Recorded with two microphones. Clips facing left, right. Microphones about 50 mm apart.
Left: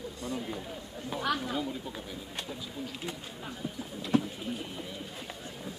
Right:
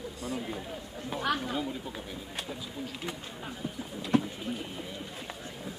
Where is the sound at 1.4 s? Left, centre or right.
Centre.